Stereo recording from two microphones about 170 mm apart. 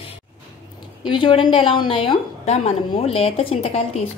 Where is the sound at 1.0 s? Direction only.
30° left (ahead or behind).